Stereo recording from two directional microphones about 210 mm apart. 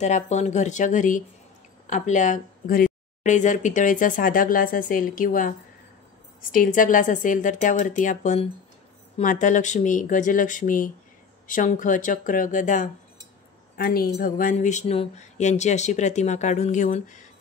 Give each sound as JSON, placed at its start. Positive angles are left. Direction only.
{"t": 0.0, "sound": "speech", "side_deg": 35}
{"t": 6.5, "sound": "speech", "side_deg": 40}